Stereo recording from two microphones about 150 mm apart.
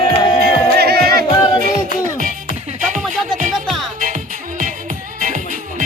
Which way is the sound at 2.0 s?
65° right (ahead or behind).